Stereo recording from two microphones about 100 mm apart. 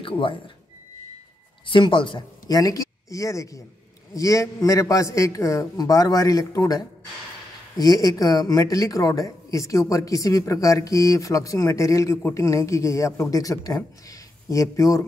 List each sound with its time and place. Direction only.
0.0 s speech: 60° left (ahead or behind)
1.7 s speech: 55° left (ahead or behind)
2.4 s a man's voice: 40° left (ahead or behind)